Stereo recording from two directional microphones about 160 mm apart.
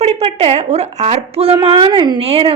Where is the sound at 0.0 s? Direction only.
40° right (ahead or behind).